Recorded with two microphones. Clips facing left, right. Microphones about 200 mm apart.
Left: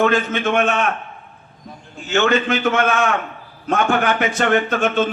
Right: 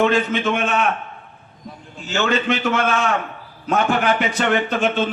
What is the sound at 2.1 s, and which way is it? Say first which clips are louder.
Speech: left 3 dB; 50° left (ahead or behind).